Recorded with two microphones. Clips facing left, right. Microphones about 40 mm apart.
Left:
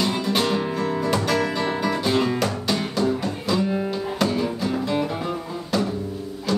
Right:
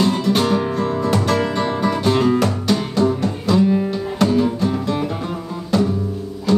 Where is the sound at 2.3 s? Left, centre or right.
Centre.